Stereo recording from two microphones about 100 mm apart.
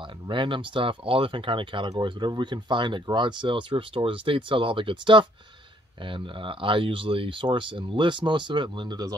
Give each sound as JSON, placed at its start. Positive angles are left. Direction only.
{"t": 0.3, "sound": "speech", "side_deg": -55}